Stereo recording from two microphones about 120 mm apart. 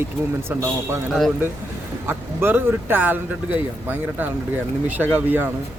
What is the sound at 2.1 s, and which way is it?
A man's voice, 20° right (ahead or behind).